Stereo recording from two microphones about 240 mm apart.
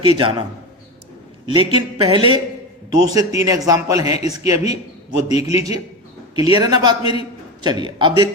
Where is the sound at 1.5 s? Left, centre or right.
Right.